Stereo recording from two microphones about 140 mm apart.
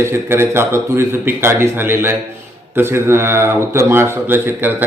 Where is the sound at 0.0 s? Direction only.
15° right (ahead or behind).